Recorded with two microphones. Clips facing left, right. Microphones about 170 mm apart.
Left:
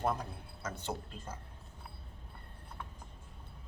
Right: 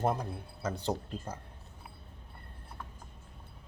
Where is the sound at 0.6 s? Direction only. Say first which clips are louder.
Right 6 dB; 35° right (ahead or behind).